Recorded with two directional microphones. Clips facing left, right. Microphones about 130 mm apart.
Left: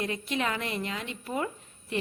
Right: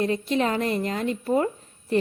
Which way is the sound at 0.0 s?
35° right (ahead or behind).